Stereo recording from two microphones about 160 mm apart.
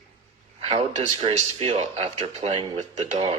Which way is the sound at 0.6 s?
35° right (ahead or behind).